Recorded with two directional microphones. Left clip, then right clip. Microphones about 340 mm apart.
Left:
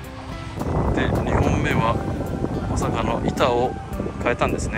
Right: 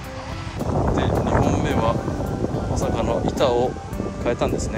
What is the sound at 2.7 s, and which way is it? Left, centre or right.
Speech, centre.